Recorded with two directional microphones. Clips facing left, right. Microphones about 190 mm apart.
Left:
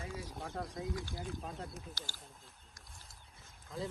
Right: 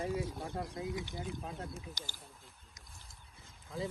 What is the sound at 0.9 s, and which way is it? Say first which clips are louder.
Speech: right 2 dB; 20° right (ahead or behind).